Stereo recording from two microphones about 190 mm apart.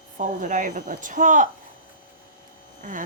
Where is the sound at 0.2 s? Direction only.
40° right (ahead or behind).